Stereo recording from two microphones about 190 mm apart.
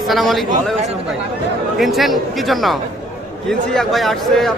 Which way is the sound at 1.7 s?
Centre (ahead or behind).